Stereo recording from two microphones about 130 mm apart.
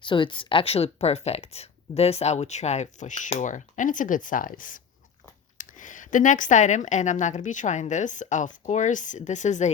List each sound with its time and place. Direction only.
0.0 s a woman's voice: 40° left (ahead or behind); by 9.7 s 65° left (ahead or behind)